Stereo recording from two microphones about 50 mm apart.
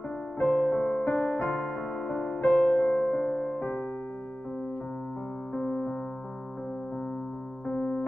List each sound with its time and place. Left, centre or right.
0.4 s music: left
5.5 s music: centre
7.6 s electric piano: centre